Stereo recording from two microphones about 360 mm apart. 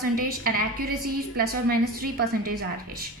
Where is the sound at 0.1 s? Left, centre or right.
Right.